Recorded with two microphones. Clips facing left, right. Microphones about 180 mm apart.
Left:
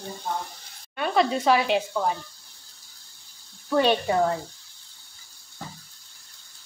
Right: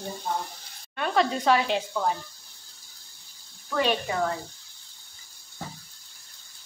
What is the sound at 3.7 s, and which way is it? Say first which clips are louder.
Speech: left 5 dB; 35° left (ahead or behind).